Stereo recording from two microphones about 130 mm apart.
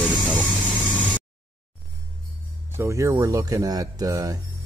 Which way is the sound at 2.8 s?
25° right (ahead or behind).